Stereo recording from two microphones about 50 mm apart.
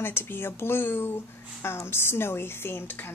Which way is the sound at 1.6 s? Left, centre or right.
Left.